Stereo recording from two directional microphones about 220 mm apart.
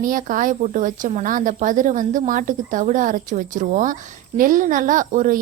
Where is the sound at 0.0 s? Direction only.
40° right (ahead or behind).